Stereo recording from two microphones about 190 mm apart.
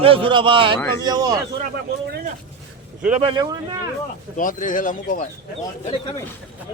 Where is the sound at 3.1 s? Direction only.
30° right (ahead or behind).